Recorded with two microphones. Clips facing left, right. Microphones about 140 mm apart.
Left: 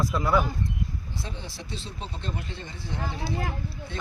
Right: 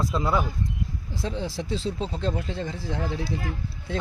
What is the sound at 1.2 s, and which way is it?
Speech, 90° right.